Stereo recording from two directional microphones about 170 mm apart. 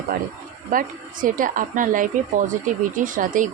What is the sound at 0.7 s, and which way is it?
A woman's voice, 55° right (ahead or behind).